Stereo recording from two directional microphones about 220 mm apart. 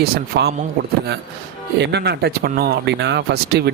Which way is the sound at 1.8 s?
50° right (ahead or behind).